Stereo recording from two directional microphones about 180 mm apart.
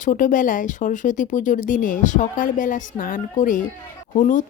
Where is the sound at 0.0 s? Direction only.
45° left (ahead or behind).